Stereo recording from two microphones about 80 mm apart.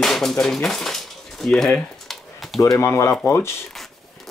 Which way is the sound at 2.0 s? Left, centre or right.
Centre.